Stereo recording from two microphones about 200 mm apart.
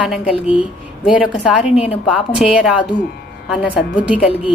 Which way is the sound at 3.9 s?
5° right (ahead or behind).